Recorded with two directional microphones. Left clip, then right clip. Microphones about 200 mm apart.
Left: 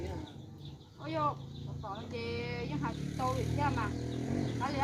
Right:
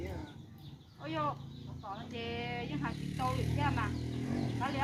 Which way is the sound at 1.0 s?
20° right (ahead or behind).